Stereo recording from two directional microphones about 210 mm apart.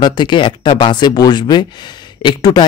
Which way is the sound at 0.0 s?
20° left (ahead or behind).